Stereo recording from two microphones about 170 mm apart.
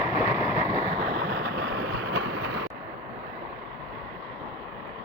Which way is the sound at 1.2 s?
70° right (ahead or behind).